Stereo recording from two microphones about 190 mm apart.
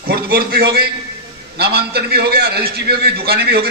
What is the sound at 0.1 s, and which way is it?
A man's voice, 55° right (ahead or behind).